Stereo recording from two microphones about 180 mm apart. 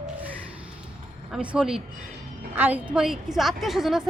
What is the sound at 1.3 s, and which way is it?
A woman's voice, 5° right (ahead or behind).